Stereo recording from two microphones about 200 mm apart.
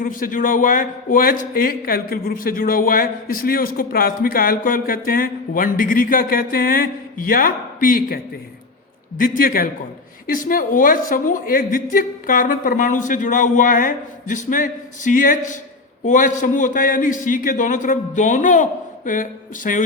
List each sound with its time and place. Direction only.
0.0 s a man's voice: 45° left (ahead or behind)